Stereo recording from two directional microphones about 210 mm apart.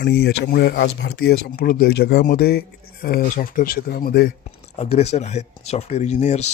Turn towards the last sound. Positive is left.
turn(degrees=35)  # may be behind; listen again after turning